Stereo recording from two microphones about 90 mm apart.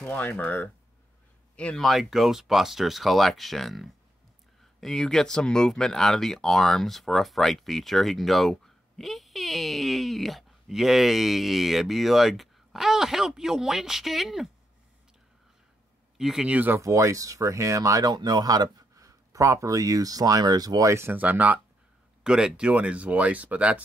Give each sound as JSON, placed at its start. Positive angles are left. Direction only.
{"t": 0.0, "sound": "speech", "side_deg": 20}
{"t": 1.8, "sound": "speech", "side_deg": 0}
{"t": 16.2, "sound": "speech", "side_deg": -5}
{"t": 16.5, "sound": "speech", "side_deg": -20}
{"t": 16.8, "sound": "speech", "side_deg": -35}
{"t": 18.1, "sound": "speech", "side_deg": -50}
{"t": 20.9, "sound": "speech", "side_deg": -30}
{"t": 21.2, "sound": "speech", "side_deg": -20}